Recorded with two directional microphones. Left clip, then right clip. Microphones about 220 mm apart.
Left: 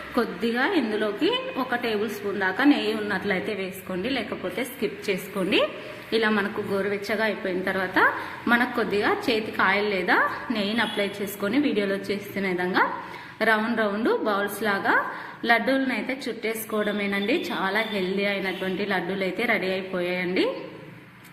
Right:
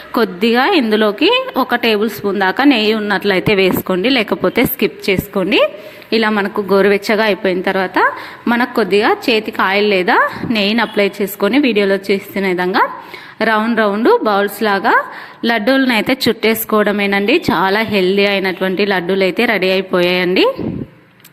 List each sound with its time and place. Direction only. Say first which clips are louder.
0.2 s a woman's voice: right 11 dB; 45° right (ahead or behind)